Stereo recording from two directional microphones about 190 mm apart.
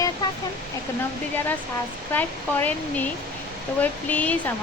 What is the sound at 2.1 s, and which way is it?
Speech, 10° left (ahead or behind).